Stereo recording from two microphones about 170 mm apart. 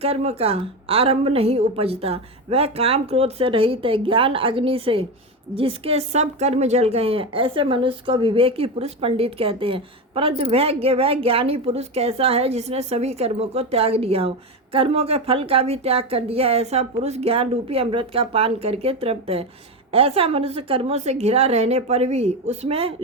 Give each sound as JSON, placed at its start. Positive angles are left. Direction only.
{"t": 0.0, "sound": "a woman's voice", "side_deg": -35}